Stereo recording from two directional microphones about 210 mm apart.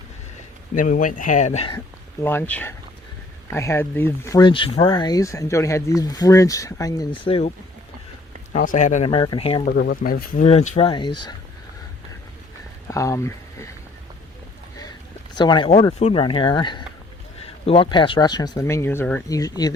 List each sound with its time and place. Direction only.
0.8 s speech: 40° left (ahead or behind)
2.2 s speech: 10° left (ahead or behind); by 7.5 s 25° left (ahead or behind)
8.5 s speech: 40° left (ahead or behind)
9.0 s speech: 20° left (ahead or behind)
9.7 s speech: 45° left (ahead or behind); by 11.3 s 20° left (ahead or behind)
12.9 s speech: 15° left (ahead or behind)
15.4 s speech: 20° left (ahead or behind)